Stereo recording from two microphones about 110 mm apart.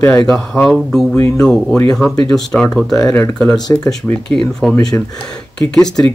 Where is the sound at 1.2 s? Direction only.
25° left (ahead or behind).